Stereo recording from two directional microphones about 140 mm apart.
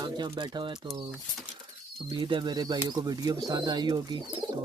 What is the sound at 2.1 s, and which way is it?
Speech, 35° right (ahead or behind).